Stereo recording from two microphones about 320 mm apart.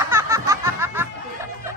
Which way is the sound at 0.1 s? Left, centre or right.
Centre.